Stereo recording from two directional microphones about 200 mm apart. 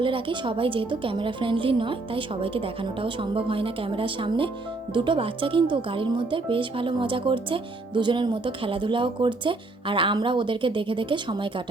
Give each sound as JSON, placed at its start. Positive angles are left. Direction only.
{"t": 0.0, "sound": "speech", "side_deg": -25}